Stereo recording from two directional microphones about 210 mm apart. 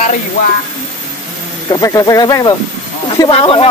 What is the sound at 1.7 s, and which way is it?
Speech, 15° left (ahead or behind).